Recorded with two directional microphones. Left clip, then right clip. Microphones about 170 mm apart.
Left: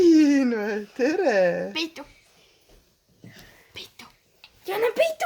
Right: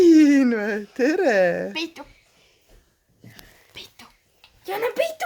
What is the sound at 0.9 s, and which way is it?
Speech, 50° right (ahead or behind).